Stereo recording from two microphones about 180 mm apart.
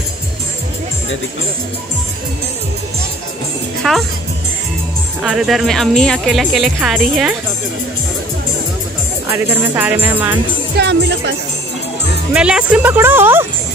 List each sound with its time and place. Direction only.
3.8 s speech: centre (ahead or behind)
5.2 s speech: centre (ahead or behind)
9.6 s speech: 10° right (ahead or behind)
10.8 s speech: 80° right
12.4 s speech: 5° right (ahead or behind)